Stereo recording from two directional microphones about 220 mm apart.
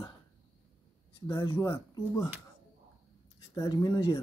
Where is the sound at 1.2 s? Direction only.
20° left (ahead or behind).